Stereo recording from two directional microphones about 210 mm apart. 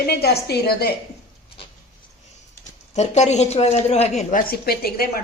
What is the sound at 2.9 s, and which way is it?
Speech, 35° left (ahead or behind).